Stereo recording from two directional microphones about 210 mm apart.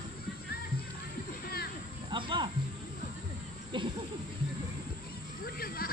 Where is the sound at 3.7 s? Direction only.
20° right (ahead or behind).